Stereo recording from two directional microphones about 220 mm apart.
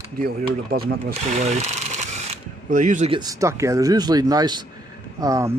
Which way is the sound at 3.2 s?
15° right (ahead or behind).